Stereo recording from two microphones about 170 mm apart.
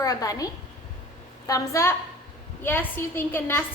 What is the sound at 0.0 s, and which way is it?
A woman's voice, 20° left (ahead or behind).